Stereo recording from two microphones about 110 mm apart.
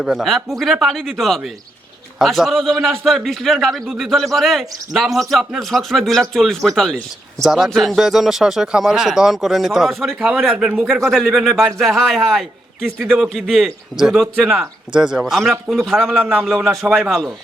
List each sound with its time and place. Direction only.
0.0 s speech: centre (ahead or behind)